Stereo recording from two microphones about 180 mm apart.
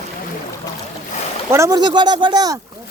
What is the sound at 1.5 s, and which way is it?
Speech, 20° right (ahead or behind).